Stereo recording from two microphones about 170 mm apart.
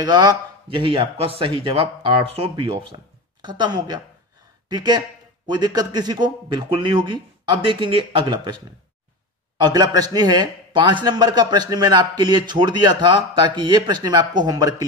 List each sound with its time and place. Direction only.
0.0 s a man's voice: 25° right (ahead or behind)
9.6 s a man's voice: 25° right (ahead or behind)